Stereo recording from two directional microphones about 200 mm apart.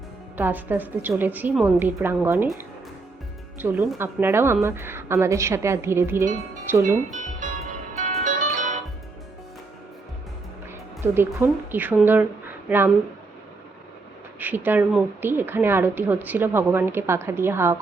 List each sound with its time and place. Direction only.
0.3 s a woman's voice: 10° right (ahead or behind)
3.6 s a woman's voice: 10° right (ahead or behind)
7.9 s music: 40° right (ahead or behind)
11.0 s a woman's voice: 10° right (ahead or behind)
14.3 s a woman's voice: 10° right (ahead or behind)